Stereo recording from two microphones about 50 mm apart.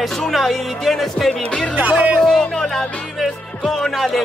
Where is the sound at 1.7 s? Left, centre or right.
Right.